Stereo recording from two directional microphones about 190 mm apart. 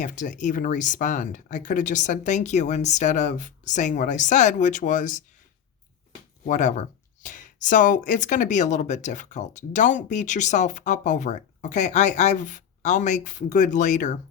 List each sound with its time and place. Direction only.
0.0 s speech: 40° left (ahead or behind)
6.4 s speech: 40° left (ahead or behind)